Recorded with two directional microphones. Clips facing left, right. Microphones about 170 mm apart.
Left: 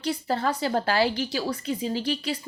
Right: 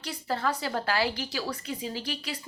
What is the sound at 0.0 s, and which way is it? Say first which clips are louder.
A woman's voice: left 4 dB; 30° left (ahead or behind).